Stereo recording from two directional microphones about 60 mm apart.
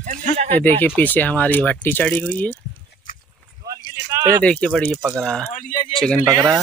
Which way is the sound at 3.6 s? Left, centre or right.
Right.